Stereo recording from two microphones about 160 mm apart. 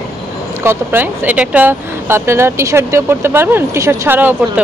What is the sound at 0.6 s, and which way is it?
Speech, 15° right (ahead or behind).